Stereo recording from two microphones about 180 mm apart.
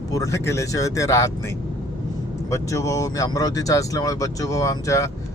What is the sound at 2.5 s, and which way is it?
Speech, 15° left (ahead or behind).